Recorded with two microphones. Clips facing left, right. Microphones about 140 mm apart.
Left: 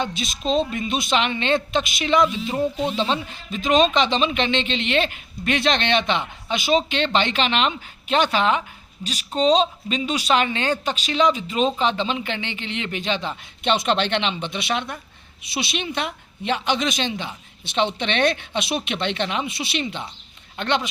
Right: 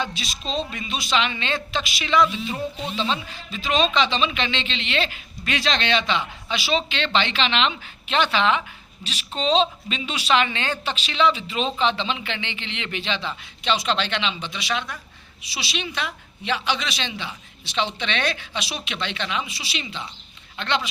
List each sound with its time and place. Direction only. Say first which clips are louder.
0.0 s a man's voice: left 4 dB; 50° left (ahead or behind)